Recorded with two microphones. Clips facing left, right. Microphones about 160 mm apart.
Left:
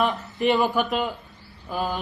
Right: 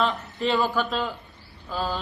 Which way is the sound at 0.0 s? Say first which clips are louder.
Left 2 dB; 15° left (ahead or behind).